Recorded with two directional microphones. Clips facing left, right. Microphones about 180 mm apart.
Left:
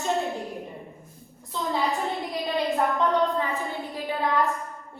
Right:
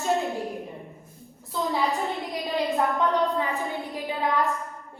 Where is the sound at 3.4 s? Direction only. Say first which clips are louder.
Right 1 dB; 15° right (ahead or behind).